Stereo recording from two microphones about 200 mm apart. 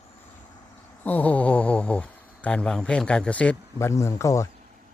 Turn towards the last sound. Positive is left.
turn(degrees=15)  # may be behind; listen again after turning